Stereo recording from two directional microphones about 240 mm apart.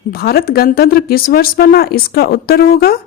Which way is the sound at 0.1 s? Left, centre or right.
Left.